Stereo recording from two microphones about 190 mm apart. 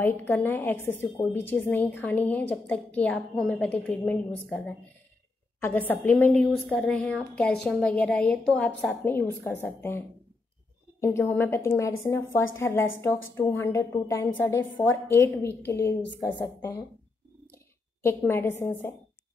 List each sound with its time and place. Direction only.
0.0 s a woman's voice: 10° left (ahead or behind)
18.0 s a woman's voice: 10° left (ahead or behind)